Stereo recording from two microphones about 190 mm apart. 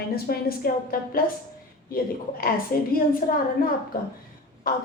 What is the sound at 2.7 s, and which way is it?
Speech, 50° left (ahead or behind).